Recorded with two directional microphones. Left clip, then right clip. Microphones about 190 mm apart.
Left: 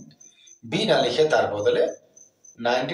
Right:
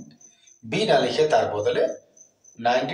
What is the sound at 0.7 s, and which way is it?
A man's voice, 10° right (ahead or behind).